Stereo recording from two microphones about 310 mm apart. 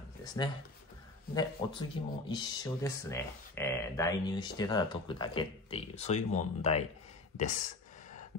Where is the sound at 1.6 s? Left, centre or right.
Centre.